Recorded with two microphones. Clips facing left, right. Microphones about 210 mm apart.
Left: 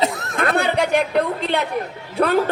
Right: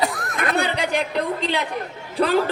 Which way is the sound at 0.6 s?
55° left (ahead or behind).